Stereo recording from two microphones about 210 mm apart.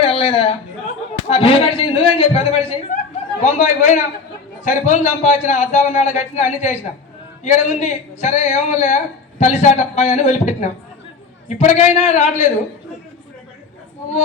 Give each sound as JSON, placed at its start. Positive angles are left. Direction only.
{"t": 0.0, "sound": "a man's voice", "side_deg": 25}